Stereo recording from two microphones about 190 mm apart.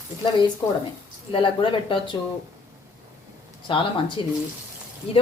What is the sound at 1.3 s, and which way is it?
Speech, 25° left (ahead or behind).